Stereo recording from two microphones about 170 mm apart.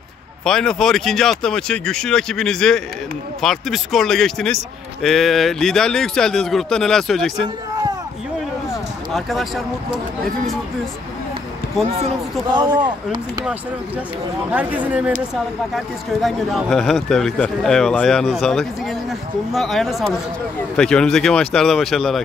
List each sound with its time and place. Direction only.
0.5 s speech: 5° left (ahead or behind)
9.1 s speech: centre (ahead or behind)
12.5 s speech: 25° right (ahead or behind)
14.5 s speech: 10° right (ahead or behind)